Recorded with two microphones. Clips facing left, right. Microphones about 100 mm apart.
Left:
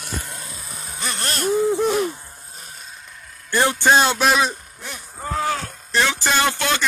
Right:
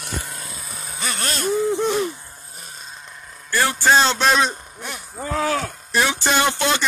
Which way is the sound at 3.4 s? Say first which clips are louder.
Left 1 dB; 20° left (ahead or behind).